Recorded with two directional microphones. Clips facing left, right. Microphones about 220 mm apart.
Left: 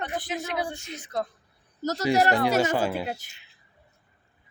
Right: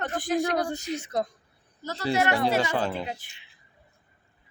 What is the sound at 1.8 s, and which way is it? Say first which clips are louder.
Speech: left 7 dB; 40° left (ahead or behind).